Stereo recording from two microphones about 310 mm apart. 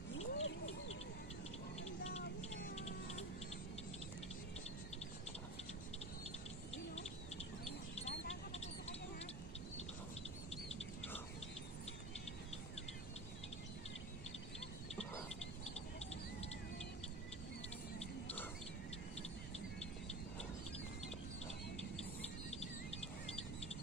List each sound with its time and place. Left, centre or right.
0.1 s bird: left
1.8 s music: left
6.7 s bird: centre
8.3 s a sound: left